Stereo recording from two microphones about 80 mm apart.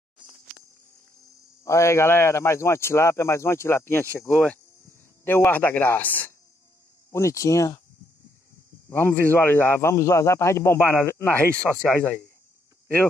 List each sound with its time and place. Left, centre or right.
1.6 s speech: left
5.2 s speech: left
7.1 s speech: left
8.8 s speech: left
11.3 s speech: centre